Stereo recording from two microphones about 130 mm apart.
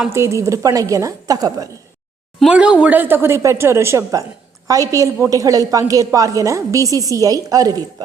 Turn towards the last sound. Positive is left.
turn(degrees=-30)  # may be behind; listen again after turning